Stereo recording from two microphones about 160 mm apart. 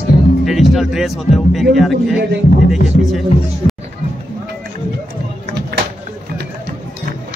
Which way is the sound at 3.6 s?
35° left (ahead or behind).